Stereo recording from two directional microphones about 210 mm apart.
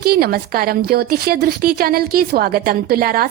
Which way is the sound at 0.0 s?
45° right (ahead or behind).